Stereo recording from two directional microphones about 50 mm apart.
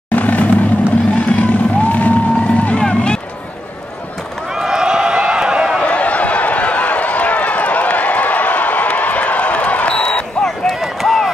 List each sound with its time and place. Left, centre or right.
0.1 s vehicle: left
1.1 s music: left
2.8 s run: centre
4.5 s a sound: centre
5.8 s run: left
10.7 s a sound: centre